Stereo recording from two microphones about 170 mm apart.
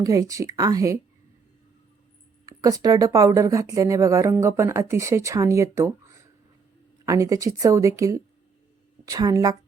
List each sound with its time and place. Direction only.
0.0 s speech: 20° right (ahead or behind)
2.5 s speech: 20° right (ahead or behind)